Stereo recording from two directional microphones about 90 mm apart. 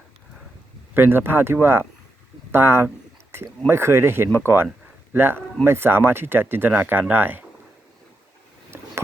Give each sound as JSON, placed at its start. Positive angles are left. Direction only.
{"t": 0.9, "sound": "speech", "side_deg": -25}